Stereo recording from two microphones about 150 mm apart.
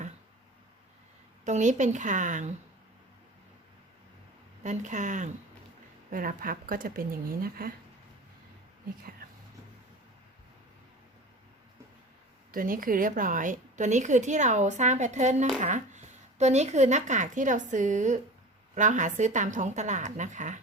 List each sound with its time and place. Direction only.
1.5 s a woman's voice: 55° right (ahead or behind)
4.6 s a woman's voice: 55° right (ahead or behind)
6.1 s speech: 65° right (ahead or behind)
12.5 s a woman's voice: 70° right (ahead or behind)